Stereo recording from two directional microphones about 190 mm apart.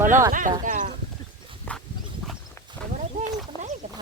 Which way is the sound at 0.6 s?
45° right (ahead or behind).